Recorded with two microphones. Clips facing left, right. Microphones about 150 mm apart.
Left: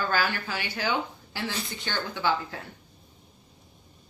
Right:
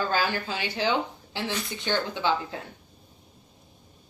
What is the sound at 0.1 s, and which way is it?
Speech, 25° right (ahead or behind).